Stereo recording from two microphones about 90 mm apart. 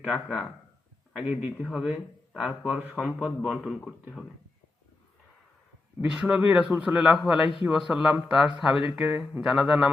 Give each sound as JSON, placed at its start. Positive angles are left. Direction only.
{"t": 0.0, "sound": "speech", "side_deg": -15}
{"t": 1.5, "sound": "speech", "side_deg": -10}
{"t": 6.0, "sound": "speech", "side_deg": -10}